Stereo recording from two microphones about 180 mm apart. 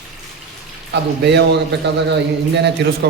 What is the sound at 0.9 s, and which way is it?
A man's voice, 70° right (ahead or behind).